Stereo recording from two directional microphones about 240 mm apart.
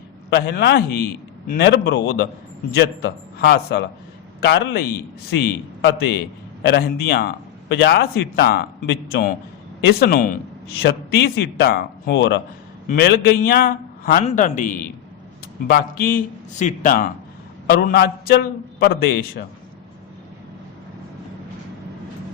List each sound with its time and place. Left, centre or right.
0.3 s a man's voice: left